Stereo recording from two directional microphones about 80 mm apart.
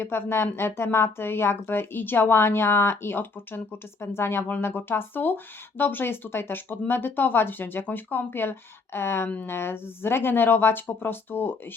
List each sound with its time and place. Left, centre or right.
0.0 s speech: left